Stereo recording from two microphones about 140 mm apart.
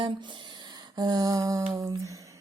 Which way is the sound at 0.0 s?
35° right (ahead or behind).